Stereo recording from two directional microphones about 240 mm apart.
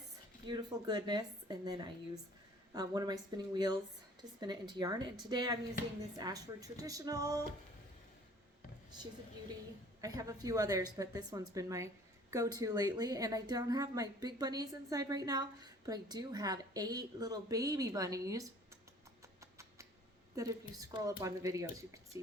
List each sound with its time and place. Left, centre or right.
0.4 s a woman's voice: centre
10.0 s a woman's voice: centre
19.4 s rodents: centre
20.3 s a woman's voice: centre